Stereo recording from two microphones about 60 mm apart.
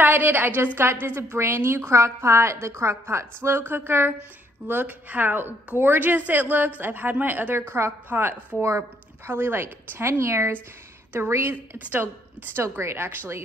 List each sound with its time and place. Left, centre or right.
0.0 s a woman's voice: right
8.5 s speech: right
9.3 s a woman's voice: right
11.5 s a woman's voice: right
12.5 s a woman's voice: right